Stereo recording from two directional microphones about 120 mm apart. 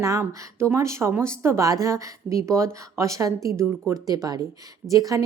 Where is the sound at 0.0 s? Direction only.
25° right (ahead or behind).